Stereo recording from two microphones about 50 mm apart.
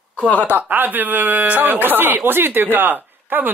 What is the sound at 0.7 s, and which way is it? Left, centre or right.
Speech, right.